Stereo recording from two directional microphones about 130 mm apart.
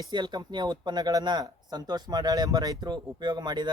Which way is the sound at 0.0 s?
35° right (ahead or behind).